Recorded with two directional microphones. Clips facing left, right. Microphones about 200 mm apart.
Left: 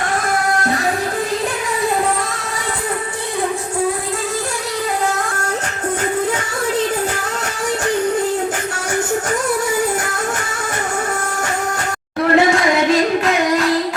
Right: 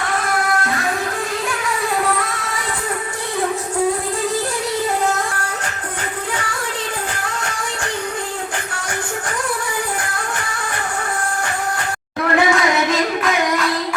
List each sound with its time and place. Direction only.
12.2 s singing: 25° left (ahead or behind)